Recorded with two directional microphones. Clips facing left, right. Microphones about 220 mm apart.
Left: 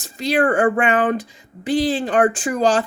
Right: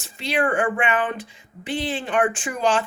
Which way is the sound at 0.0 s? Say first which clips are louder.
Left 5 dB; 40° left (ahead or behind).